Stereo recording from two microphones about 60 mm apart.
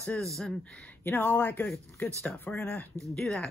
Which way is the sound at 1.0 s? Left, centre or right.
Left.